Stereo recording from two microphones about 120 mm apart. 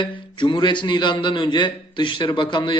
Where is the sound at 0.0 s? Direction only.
40° left (ahead or behind).